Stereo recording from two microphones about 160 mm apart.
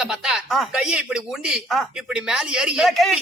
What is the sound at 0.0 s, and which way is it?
Speech, 5° right (ahead or behind).